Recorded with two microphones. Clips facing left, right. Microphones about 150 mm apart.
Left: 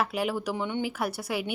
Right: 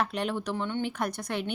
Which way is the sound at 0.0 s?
5° left (ahead or behind).